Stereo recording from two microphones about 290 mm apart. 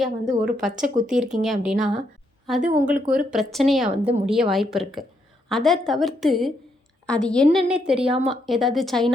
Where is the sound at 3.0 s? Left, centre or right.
Right.